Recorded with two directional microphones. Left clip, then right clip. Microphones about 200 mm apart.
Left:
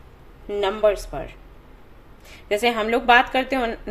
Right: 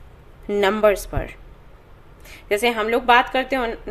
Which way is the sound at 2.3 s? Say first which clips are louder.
Right 1 dB; 10° right (ahead or behind).